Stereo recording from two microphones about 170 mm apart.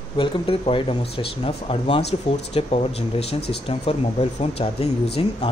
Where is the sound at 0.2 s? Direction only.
30° left (ahead or behind).